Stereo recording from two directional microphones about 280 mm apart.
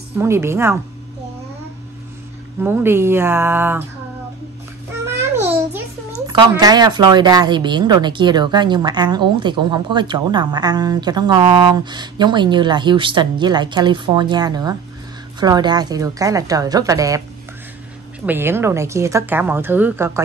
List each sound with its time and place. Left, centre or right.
0.2 s a child's voice: centre
2.6 s a child's voice: centre
5.0 s a child's voice: centre
18.2 s a child's voice: centre